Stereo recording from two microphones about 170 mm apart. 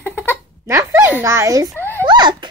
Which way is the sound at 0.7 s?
15° right (ahead or behind).